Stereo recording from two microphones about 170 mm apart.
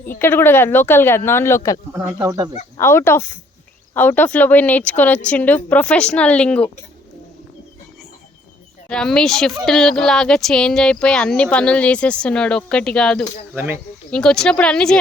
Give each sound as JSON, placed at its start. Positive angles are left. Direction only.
{"t": 0.2, "sound": "a woman's voice", "side_deg": 15}
{"t": 2.1, "sound": "speech", "side_deg": -20}
{"t": 2.7, "sound": "a woman's voice", "side_deg": 15}
{"t": 8.9, "sound": "a woman's voice", "side_deg": 5}
{"t": 13.5, "sound": "speech", "side_deg": -15}
{"t": 14.1, "sound": "a woman's voice", "side_deg": 5}